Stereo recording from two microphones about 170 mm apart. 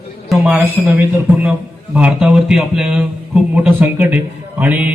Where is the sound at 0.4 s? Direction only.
10° right (ahead or behind).